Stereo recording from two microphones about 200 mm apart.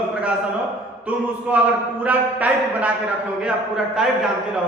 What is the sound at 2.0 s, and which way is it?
Speech, 5° right (ahead or behind).